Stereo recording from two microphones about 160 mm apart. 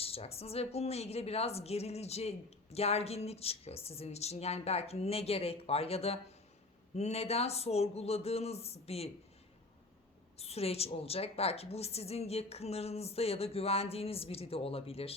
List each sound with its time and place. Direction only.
0.0 s a woman's voice: 40° left (ahead or behind)
10.3 s a woman's voice: 40° left (ahead or behind)